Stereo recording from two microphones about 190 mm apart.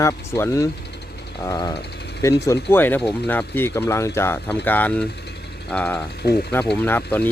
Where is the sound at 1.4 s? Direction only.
20° left (ahead or behind).